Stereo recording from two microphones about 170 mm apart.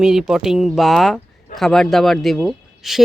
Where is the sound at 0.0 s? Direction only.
Centre (ahead or behind).